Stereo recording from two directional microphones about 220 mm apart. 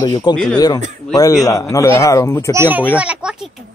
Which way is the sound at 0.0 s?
20° left (ahead or behind).